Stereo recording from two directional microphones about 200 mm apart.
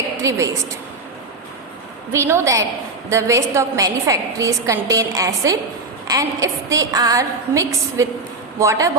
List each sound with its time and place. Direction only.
0.2 s a woman's voice: 15° right (ahead or behind)
2.1 s a woman's voice: 15° right (ahead or behind)